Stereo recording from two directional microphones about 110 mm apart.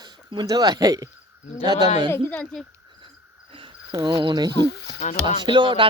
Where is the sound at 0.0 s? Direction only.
45° right (ahead or behind).